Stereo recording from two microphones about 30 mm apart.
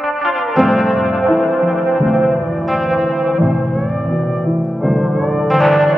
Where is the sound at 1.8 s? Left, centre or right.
Centre.